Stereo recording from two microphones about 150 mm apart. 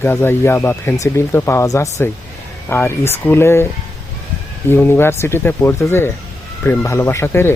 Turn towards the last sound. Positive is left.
turn(degrees=15)  # may be behind; listen again after turning